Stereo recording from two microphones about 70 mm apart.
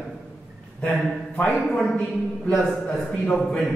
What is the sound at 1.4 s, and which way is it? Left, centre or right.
Speech, centre.